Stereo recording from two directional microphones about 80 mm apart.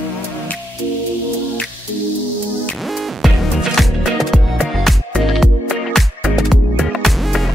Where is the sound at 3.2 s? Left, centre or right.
Centre.